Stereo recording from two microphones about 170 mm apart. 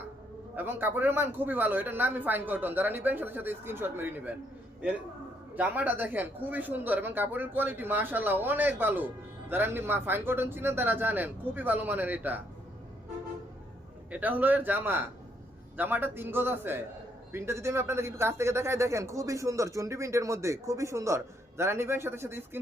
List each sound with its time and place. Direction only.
0.5 s speech: 10° right (ahead or behind)
5.5 s speech: 10° right (ahead or behind)
14.1 s speech: 10° right (ahead or behind)